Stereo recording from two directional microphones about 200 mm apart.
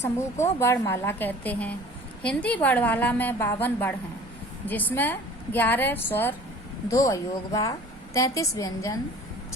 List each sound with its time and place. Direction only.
0.0 s a woman's voice: 15° left (ahead or behind)